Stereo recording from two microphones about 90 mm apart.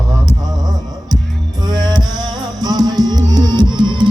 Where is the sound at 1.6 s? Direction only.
50° right (ahead or behind).